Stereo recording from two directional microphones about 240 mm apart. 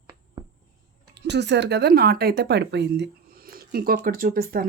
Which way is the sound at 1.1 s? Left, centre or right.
Right.